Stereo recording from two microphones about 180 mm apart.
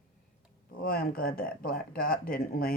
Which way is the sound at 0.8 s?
55° left (ahead or behind).